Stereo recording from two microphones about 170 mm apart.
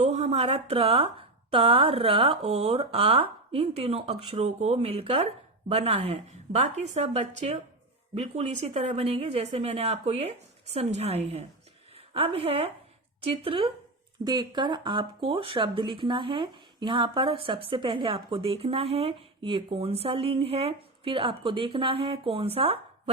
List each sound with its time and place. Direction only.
0.0 s speech: 40° right (ahead or behind)